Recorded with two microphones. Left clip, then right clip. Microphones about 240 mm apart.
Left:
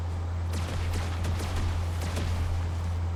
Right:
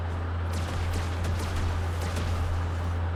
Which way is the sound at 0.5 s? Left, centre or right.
Centre.